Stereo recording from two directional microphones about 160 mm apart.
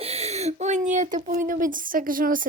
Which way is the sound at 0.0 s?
40° right (ahead or behind).